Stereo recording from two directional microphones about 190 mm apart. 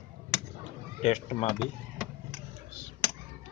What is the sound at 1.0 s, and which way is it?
Speech, 35° left (ahead or behind).